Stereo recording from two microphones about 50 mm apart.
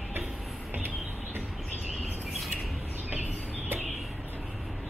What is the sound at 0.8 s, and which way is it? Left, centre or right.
Music, right.